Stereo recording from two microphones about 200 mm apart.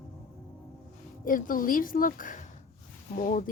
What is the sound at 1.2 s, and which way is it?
Speech, 45° left (ahead or behind).